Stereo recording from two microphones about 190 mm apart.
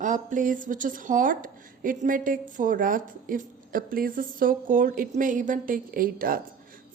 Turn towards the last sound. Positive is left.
turn(degrees=-50)  # may be behind; listen again after turning